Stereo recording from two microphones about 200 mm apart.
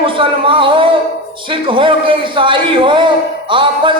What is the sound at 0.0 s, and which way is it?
A man's voice, 25° right (ahead or behind).